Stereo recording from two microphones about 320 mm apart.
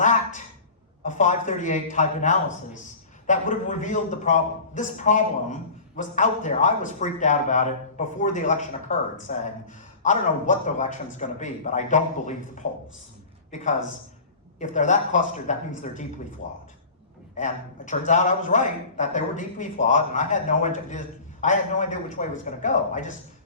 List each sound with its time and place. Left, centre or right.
0.0 s a sound: left
1.0 s a man's voice: left
14.6 s a man's voice: left
17.3 s a man's voice: left